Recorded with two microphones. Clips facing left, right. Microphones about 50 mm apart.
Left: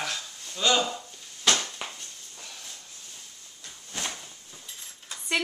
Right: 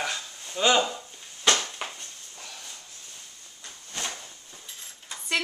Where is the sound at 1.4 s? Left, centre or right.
Centre.